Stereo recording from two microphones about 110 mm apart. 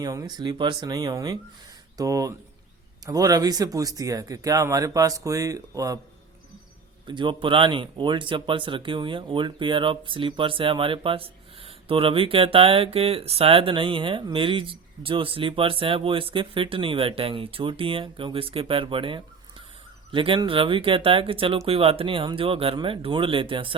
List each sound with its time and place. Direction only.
0.0 s speech: 35° right (ahead or behind)
7.1 s speech: 45° right (ahead or behind)